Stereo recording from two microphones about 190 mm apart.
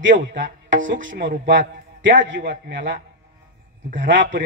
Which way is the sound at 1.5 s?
75° right (ahead or behind).